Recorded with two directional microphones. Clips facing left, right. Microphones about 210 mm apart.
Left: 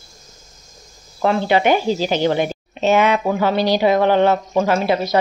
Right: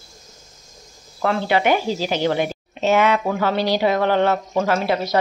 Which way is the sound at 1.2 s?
20° left (ahead or behind).